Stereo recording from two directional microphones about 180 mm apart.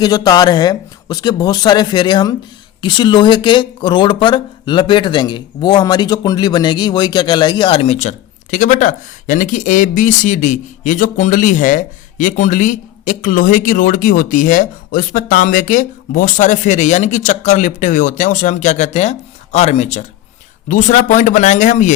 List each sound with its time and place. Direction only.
0.0 s speech: 20° left (ahead or behind); by 21.9 s 45° left (ahead or behind)